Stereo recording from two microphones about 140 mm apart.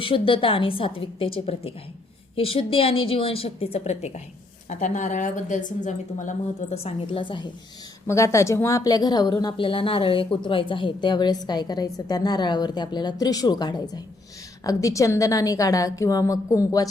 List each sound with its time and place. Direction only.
0.0 s a woman's voice: 40° left (ahead or behind)
4.7 s a woman's voice: 60° left (ahead or behind)
6.8 s a woman's voice: 40° left (ahead or behind)
8.0 s a woman's voice: 20° left (ahead or behind)